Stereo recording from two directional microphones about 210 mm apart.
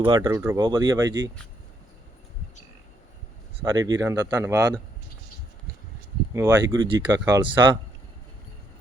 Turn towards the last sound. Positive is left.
turn(degrees=-20)  # may be behind; listen again after turning